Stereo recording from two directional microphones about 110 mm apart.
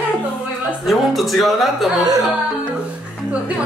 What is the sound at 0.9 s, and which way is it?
A man's voice, centre (ahead or behind).